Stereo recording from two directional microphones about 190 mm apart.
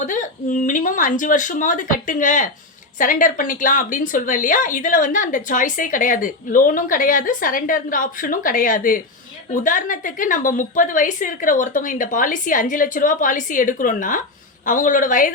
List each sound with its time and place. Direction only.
0.0 s a woman's voice: 40° left (ahead or behind)